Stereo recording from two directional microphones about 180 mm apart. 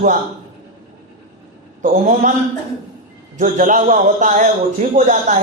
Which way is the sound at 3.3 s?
45° right (ahead or behind).